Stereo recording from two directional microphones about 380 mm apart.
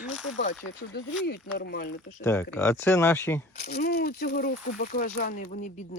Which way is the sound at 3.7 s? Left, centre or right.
Left.